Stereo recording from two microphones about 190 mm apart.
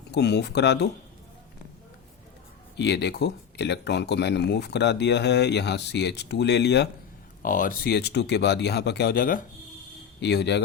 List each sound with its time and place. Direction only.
0.1 s speech: 60° left (ahead or behind)
2.7 s speech: 65° left (ahead or behind)
7.4 s speech: 45° left (ahead or behind)
10.2 s speech: 60° left (ahead or behind)